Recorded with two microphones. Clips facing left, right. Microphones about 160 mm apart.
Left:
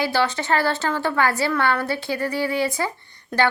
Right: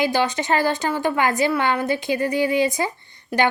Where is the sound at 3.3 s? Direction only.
5° right (ahead or behind).